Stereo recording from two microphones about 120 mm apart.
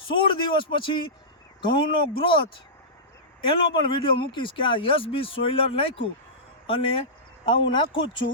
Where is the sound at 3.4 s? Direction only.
45° left (ahead or behind).